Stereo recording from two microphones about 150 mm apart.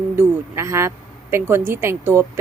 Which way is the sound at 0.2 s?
20° right (ahead or behind).